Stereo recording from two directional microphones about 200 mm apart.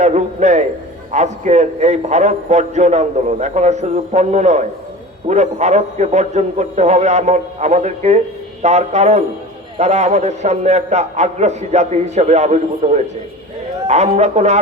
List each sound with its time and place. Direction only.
0.0 s a man's voice: 35° right (ahead or behind)